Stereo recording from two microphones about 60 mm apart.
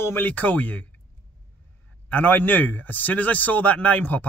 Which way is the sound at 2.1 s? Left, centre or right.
Left.